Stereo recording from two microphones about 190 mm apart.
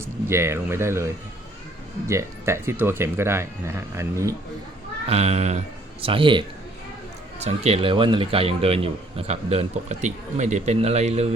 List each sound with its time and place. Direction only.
0.3 s speech: 15° right (ahead or behind)
5.0 s a man's voice: 35° right (ahead or behind)
7.4 s a man's voice: 35° right (ahead or behind)